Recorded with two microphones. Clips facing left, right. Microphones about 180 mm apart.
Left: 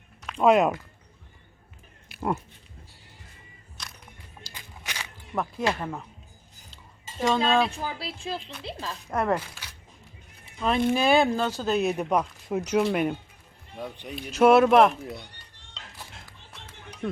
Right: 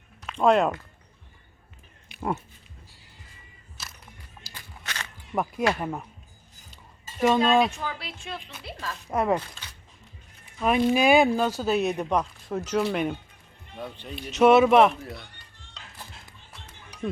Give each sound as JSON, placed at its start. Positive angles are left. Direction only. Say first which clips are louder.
{"t": 0.3, "sound": "speech", "louder": "left 1 dB", "side_deg": 5}
{"t": 2.0, "sound": "a sound", "louder": "left 1 dB", "side_deg": 0}
{"t": 3.8, "sound": "music", "louder": "even", "side_deg": -5}
{"t": 4.5, "sound": "a sound", "louder": "right 1 dB", "side_deg": 10}
{"t": 5.3, "sound": "cutlery", "louder": "right 2 dB", "side_deg": -15}
{"t": 7.2, "sound": "cutlery", "louder": "right 3 dB", "side_deg": -15}
{"t": 7.8, "sound": "a woman's voice", "louder": "left 1 dB", "side_deg": 30}
{"t": 9.0, "sound": "cutlery", "louder": "right 1 dB", "side_deg": -10}
{"t": 10.6, "sound": "speech", "louder": "right 2 dB", "side_deg": -10}
{"t": 14.3, "sound": "speech", "louder": "even", "side_deg": 0}
{"t": 15.0, "sound": "a woman's voice", "louder": "left 2 dB", "side_deg": 20}